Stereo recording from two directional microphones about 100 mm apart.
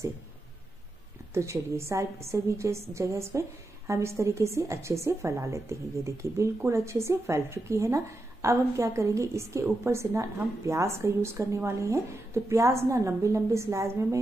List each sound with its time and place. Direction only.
1.3 s a woman's voice: 30° right (ahead or behind)